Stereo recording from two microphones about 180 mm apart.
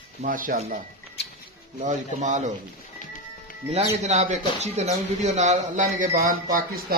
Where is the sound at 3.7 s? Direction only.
35° right (ahead or behind).